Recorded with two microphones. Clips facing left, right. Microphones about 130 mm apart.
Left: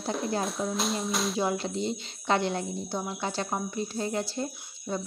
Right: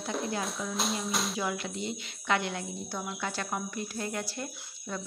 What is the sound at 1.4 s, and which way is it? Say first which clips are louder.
Speech: left 5 dB; 30° left (ahead or behind).